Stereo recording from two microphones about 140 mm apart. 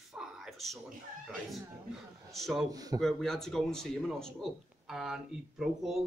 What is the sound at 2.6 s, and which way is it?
Speech, 25° right (ahead or behind).